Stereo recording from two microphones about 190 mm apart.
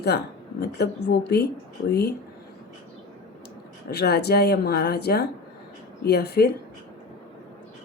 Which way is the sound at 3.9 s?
60° left (ahead or behind).